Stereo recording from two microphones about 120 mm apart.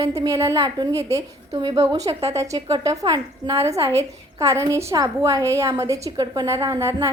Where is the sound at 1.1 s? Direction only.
35° right (ahead or behind).